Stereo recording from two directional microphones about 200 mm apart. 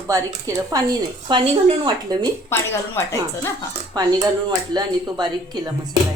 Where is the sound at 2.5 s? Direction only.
10° left (ahead or behind).